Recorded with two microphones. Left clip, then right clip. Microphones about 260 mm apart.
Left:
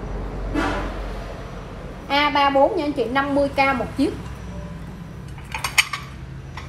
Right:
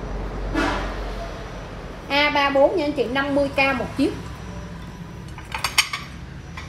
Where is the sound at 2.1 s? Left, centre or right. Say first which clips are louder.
Left 1 dB; centre.